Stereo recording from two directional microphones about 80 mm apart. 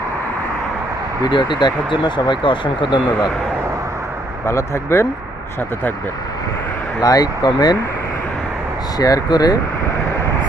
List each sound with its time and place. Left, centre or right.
1.2 s speech: left
4.4 s speech: left
7.0 s speech: left
9.0 s speech: left